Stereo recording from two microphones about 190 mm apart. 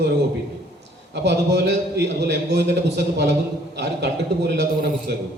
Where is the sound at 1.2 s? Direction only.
65° right (ahead or behind).